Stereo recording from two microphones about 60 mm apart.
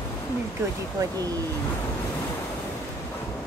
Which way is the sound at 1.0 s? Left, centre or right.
Right.